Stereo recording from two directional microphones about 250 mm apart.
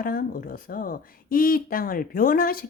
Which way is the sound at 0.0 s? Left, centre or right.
Left.